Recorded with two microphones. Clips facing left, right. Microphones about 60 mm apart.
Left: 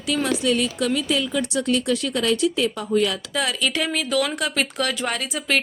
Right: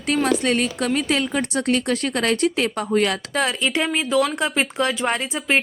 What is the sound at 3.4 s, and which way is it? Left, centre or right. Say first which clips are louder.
Speech: right 1 dB; right.